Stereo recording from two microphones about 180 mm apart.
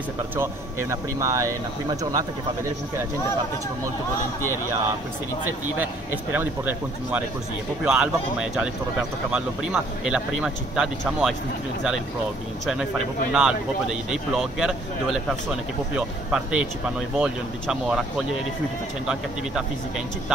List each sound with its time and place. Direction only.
0.4 s speech: 15° right (ahead or behind)
6.3 s speech: 10° right (ahead or behind)
13.3 s speech: 5° right (ahead or behind)